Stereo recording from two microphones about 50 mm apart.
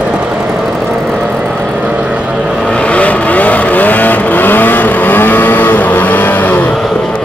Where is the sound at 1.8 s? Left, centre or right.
Right.